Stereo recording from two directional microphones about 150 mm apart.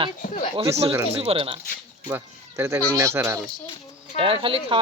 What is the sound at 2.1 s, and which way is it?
Speech, 15° right (ahead or behind).